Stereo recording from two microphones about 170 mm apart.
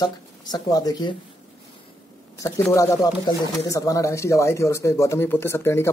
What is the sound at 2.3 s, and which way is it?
A man's voice, 15° left (ahead or behind).